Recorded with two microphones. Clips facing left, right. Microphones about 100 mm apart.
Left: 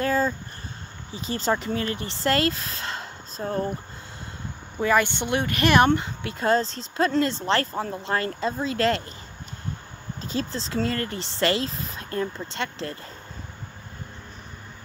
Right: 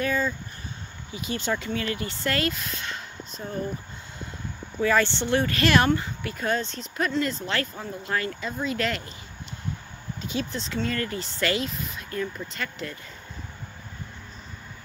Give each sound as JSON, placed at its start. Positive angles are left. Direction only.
{"t": 0.0, "sound": "a sound", "side_deg": 35}
{"t": 1.1, "sound": "speech", "side_deg": 35}
{"t": 4.8, "sound": "speech", "side_deg": 15}
{"t": 10.2, "sound": "speech", "side_deg": 35}